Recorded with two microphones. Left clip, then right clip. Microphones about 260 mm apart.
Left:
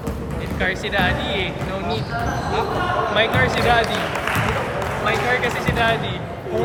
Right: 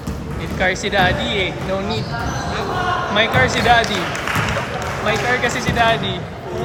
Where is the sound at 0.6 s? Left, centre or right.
Right.